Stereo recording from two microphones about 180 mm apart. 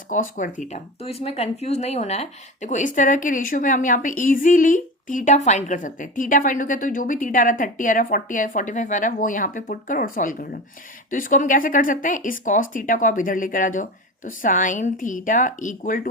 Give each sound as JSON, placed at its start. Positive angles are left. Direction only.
{"t": 0.1, "sound": "speech", "side_deg": 45}
{"t": 0.7, "sound": "speech", "side_deg": 35}